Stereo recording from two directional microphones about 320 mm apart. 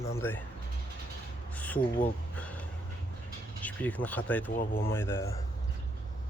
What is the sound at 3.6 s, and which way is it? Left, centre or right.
Speech, centre.